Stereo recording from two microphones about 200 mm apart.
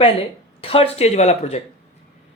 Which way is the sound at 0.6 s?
30° left (ahead or behind).